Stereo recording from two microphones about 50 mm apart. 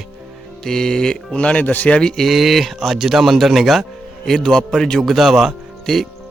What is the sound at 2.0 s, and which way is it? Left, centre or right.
Speech, centre.